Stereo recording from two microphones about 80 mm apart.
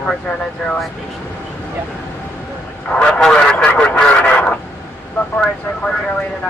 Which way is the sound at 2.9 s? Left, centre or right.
Centre.